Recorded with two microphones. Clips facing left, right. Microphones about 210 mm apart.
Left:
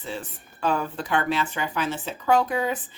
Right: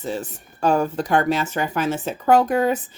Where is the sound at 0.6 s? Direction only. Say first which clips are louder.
Right 6 dB; 45° right (ahead or behind).